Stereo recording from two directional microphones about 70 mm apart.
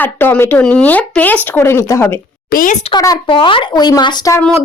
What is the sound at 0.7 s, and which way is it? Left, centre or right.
A child's voice, left.